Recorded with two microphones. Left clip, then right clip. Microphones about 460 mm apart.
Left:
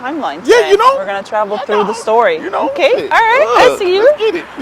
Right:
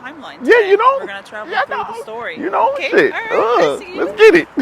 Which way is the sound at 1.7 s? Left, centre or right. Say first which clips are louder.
Left 9 dB; right.